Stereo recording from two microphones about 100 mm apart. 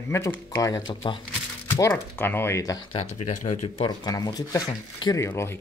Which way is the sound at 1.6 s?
25° left (ahead or behind).